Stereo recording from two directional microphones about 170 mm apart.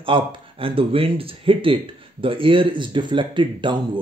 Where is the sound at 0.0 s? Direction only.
30° right (ahead or behind).